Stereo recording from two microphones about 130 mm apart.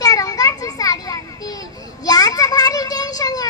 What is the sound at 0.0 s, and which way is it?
Children playing, 30° left (ahead or behind).